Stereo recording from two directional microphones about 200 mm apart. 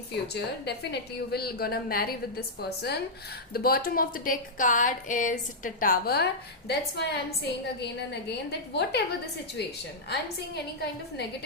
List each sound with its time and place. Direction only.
0.3 s a woman's voice: 55° left (ahead or behind)